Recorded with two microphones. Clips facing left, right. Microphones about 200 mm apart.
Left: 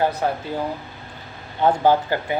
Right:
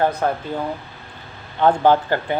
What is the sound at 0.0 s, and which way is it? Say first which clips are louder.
Speech: right 2 dB; 55° right (ahead or behind).